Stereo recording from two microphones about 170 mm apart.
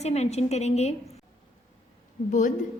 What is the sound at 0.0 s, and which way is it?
Speech, 40° left (ahead or behind).